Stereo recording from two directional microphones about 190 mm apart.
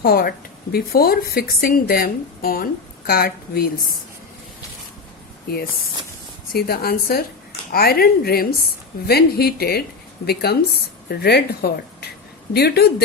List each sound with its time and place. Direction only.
0.0 s speech: 55° left (ahead or behind)
6.5 s speech: 50° left (ahead or behind)